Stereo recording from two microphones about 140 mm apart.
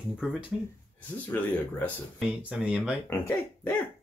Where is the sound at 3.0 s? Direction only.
15° left (ahead or behind).